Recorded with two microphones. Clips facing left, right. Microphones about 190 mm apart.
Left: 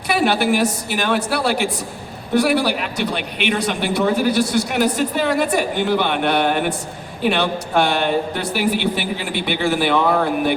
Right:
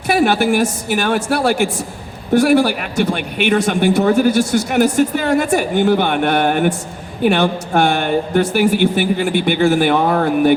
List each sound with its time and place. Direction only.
0.1 s a man's voice: 50° right (ahead or behind)